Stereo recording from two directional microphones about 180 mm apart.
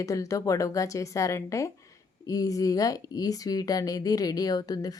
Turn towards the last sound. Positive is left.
turn(degrees=20)  # may be behind; listen again after turning